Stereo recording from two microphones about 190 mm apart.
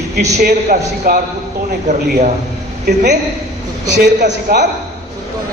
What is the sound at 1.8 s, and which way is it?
Speech, 40° right (ahead or behind).